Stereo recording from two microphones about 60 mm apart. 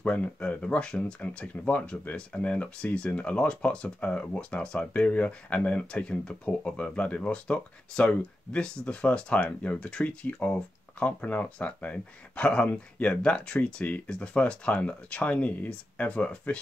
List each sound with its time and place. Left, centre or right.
0.0 s speech: centre